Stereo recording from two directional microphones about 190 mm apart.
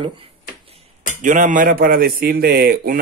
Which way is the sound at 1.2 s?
40° right (ahead or behind).